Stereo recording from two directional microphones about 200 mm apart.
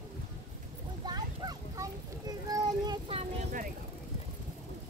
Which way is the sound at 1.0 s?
20° right (ahead or behind).